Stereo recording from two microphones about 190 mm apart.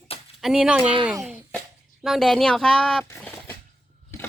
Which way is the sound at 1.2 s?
5° right (ahead or behind).